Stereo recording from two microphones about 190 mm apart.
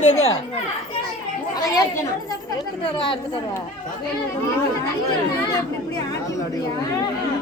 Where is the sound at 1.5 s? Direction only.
20° left (ahead or behind).